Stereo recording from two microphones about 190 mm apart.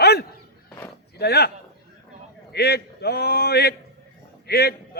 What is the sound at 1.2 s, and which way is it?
Speech, 60° left (ahead or behind).